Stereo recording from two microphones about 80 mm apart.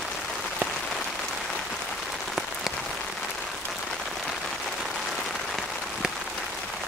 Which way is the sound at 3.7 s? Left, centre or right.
Centre.